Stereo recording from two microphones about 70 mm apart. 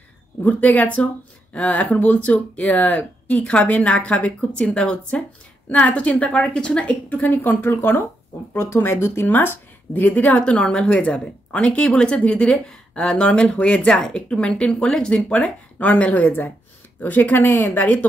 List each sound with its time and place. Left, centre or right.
0.4 s a woman's voice: left
7.1 s a woman's voice: left